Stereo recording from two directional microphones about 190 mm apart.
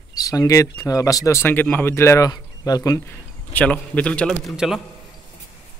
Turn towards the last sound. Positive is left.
turn(degrees=0)  # may be behind; listen again after turning